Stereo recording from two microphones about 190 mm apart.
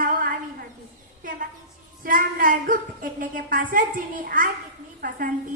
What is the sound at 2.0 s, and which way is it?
A woman's voice, 50° right (ahead or behind).